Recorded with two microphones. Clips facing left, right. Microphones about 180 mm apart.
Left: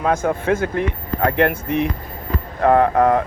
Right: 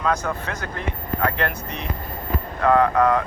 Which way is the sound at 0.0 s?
50° left (ahead or behind).